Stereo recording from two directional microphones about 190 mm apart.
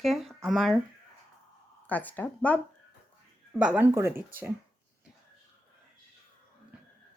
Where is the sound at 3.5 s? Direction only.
5° right (ahead or behind).